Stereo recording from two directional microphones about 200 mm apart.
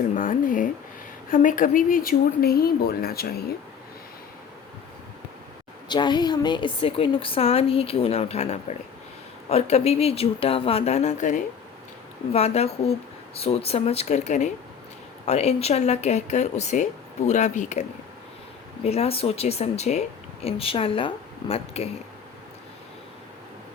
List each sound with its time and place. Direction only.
0.1 s speech: 45° left (ahead or behind)
5.9 s a woman's voice: 20° left (ahead or behind)